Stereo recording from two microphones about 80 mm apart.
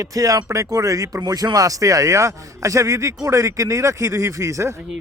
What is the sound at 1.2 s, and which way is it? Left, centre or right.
A man's voice, right.